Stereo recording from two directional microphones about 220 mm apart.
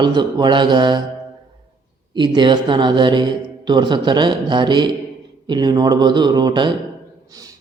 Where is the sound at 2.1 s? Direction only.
20° right (ahead or behind).